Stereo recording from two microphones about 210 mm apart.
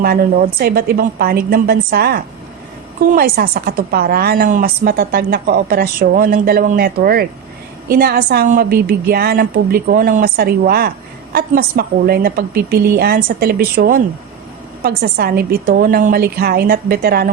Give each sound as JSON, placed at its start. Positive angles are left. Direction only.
{"t": 0.0, "sound": "a woman's voice", "side_deg": -45}